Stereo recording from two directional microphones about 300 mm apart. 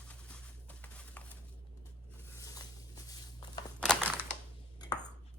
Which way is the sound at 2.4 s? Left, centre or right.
Centre.